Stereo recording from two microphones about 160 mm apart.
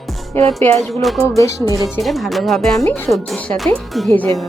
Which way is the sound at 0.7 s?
Centre (ahead or behind).